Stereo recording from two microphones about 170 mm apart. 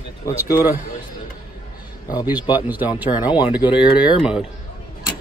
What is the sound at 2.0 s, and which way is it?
Speech, 20° left (ahead or behind).